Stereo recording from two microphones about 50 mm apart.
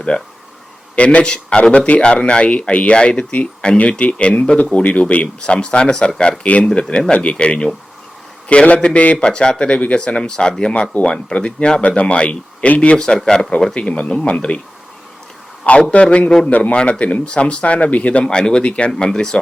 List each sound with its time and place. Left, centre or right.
0.1 s speech: left
6.4 s speech: left
6.7 s speech: centre
13.0 s speech: centre
13.7 s speech: left
15.6 s speech: left